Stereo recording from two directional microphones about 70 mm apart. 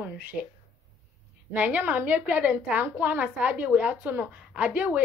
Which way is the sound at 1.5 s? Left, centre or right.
Right.